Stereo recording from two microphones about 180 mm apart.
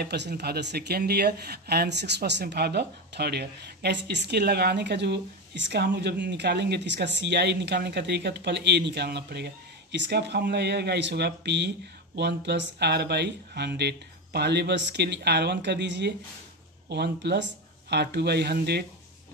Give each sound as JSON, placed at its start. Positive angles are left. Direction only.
{"t": 0.0, "sound": "speech", "side_deg": -70}